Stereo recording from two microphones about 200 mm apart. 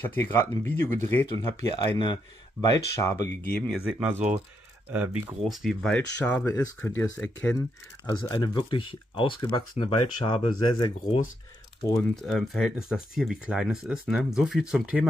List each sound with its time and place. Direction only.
0.1 s speech: 10° left (ahead or behind)
3.8 s speech: 5° right (ahead or behind); by 7.6 s 10° left (ahead or behind)
8.1 s speech: 20° left (ahead or behind)
12.2 s speech: centre (ahead or behind)